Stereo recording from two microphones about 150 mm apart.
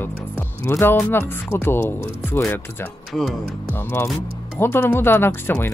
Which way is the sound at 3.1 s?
Centre (ahead or behind).